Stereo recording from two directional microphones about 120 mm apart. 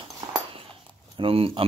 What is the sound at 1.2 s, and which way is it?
Speech, 50° right (ahead or behind).